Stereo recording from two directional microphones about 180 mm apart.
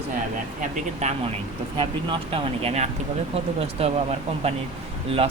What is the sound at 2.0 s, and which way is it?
Speech, 35° right (ahead or behind).